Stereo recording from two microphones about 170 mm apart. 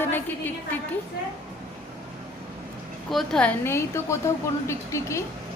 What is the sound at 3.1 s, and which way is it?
A woman's voice, centre (ahead or behind).